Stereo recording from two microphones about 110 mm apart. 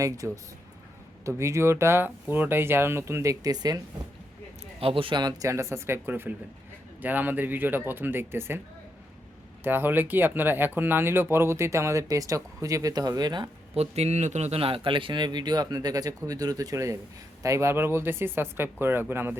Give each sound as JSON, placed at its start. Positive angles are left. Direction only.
{"t": 0.0, "sound": "speech", "side_deg": -30}
{"t": 4.8, "sound": "speech", "side_deg": -55}
{"t": 9.6, "sound": "speech", "side_deg": -20}
{"t": 13.7, "sound": "a man's voice", "side_deg": -75}